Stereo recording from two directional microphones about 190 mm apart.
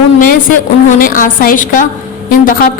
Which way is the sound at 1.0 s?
45° left (ahead or behind).